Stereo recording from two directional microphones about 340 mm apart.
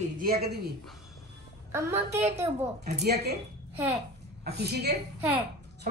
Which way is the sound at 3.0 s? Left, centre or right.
Right.